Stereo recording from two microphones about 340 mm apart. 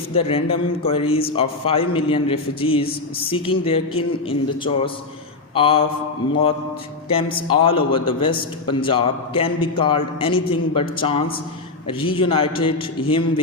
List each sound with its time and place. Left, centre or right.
0.1 s a man's voice: centre
7.1 s a man's voice: centre